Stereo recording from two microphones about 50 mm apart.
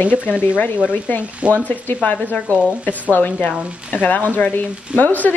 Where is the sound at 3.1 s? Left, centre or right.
Left.